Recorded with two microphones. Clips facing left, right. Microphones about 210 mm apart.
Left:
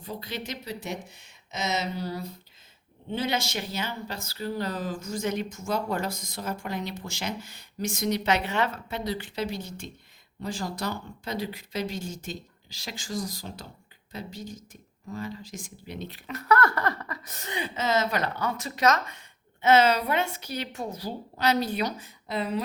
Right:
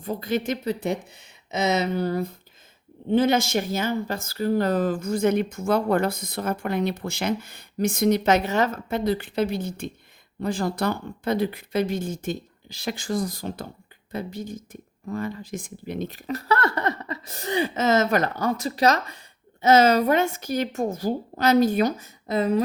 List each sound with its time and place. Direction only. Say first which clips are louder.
0.0 s a woman's voice: right 10 dB; 50° right (ahead or behind)